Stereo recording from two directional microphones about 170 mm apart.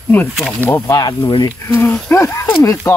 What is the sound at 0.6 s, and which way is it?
Speech, 10° left (ahead or behind).